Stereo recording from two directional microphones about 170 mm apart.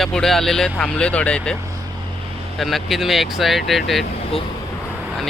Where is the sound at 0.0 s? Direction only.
Centre (ahead or behind).